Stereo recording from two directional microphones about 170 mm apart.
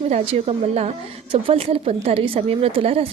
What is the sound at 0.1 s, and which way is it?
A woman's voice, 35° right (ahead or behind).